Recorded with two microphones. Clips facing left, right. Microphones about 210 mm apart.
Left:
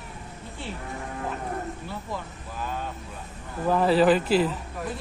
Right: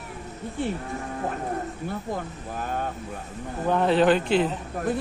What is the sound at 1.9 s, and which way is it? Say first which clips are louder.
Speech: right 4 dB; 50° right (ahead or behind).